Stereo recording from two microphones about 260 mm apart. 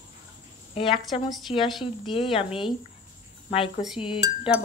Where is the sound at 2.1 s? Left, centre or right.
Left.